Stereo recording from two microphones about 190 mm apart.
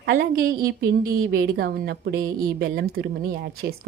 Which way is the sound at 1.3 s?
55° right (ahead or behind).